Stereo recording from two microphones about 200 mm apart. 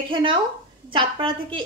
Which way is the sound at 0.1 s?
25° right (ahead or behind).